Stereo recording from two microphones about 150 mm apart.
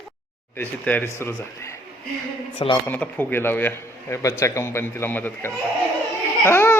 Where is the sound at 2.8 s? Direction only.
10° left (ahead or behind).